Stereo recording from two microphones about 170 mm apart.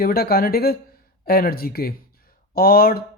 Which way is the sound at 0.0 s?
65° left (ahead or behind).